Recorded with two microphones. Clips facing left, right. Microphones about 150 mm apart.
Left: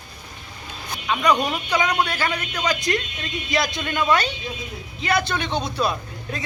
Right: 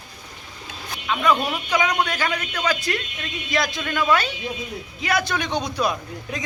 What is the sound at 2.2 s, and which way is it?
Speech, 10° right (ahead or behind).